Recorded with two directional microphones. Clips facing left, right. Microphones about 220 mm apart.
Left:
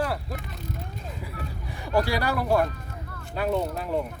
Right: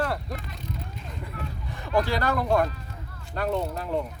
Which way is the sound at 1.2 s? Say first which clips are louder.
Even; 10° left (ahead or behind).